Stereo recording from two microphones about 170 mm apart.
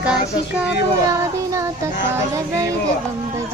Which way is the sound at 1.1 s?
20° right (ahead or behind).